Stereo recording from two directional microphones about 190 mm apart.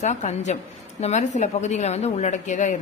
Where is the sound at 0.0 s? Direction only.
40° left (ahead or behind).